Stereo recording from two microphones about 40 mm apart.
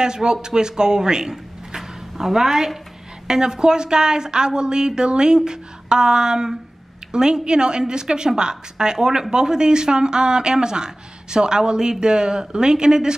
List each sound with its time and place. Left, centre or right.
0.0 s a woman's voice: centre
1.3 s a sound: centre
3.3 s a woman's voice: centre